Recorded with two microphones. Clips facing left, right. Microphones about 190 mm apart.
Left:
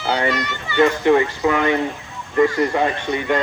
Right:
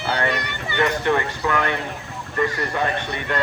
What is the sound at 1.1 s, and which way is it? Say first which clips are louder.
Speech: left 6 dB; 20° left (ahead or behind).